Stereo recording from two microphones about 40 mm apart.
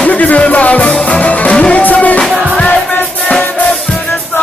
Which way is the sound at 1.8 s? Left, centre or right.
Left.